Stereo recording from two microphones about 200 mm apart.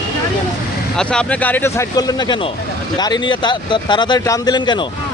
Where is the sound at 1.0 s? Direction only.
5° left (ahead or behind); by 4.8 s 20° left (ahead or behind).